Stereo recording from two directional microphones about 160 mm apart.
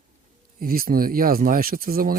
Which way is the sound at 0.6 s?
65° right (ahead or behind).